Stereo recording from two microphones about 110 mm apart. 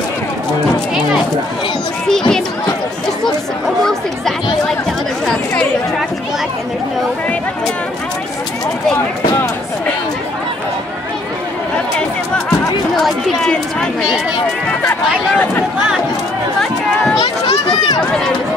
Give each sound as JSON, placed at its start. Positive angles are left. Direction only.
{"t": 2.0, "sound": "speech", "side_deg": 5}
{"t": 5.2, "sound": "chatter", "side_deg": 10}
{"t": 12.4, "sound": "chatter", "side_deg": 5}
{"t": 14.9, "sound": "speech", "side_deg": 20}
{"t": 17.2, "sound": "speech", "side_deg": 40}